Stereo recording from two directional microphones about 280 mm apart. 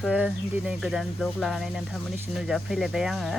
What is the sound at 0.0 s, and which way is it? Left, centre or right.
Speech, centre.